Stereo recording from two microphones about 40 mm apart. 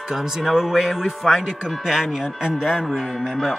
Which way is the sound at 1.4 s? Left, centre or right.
Centre.